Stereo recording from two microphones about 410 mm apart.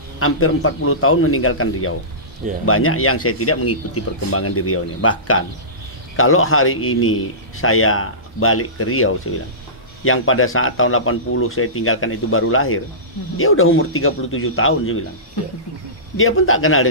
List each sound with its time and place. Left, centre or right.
0.2 s a man's voice: left
16.2 s a man's voice: left